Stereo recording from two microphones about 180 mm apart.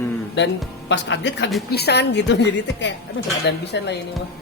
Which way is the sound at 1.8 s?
65° left (ahead or behind).